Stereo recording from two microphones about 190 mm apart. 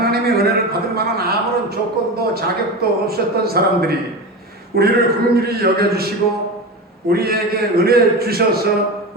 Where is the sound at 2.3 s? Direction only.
55° right (ahead or behind).